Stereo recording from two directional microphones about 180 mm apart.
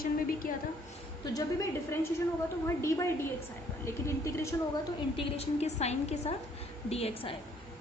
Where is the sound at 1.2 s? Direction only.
20° left (ahead or behind).